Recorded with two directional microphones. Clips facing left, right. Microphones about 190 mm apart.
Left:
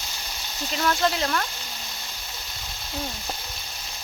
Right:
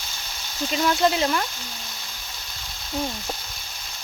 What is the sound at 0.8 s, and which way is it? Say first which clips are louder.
Speech: right 3 dB; 10° right (ahead or behind).